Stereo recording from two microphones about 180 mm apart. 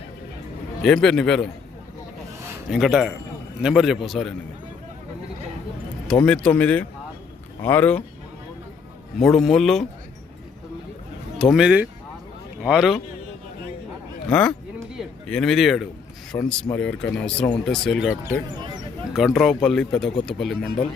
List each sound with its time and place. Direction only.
0.8 s speech: 5° left (ahead or behind)
2.6 s speech: centre (ahead or behind)
6.2 s speech: 5° left (ahead or behind)
9.2 s speech: centre (ahead or behind)
11.3 s speech: centre (ahead or behind)
14.3 s a man's voice: 5° left (ahead or behind)
16.3 s speech: 20° left (ahead or behind)
16.7 s speech: 5° left (ahead or behind)